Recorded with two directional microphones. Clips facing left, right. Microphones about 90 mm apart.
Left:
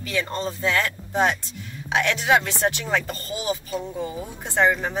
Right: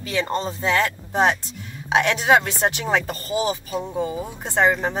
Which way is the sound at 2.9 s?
25° right (ahead or behind).